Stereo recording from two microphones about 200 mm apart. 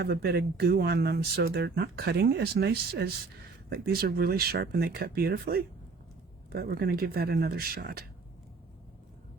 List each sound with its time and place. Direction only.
0.0 s speech: 55° right (ahead or behind)